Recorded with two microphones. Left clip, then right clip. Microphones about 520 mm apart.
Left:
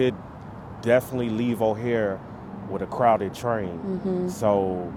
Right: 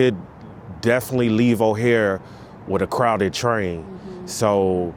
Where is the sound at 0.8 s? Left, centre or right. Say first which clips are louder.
Right 2 dB; right.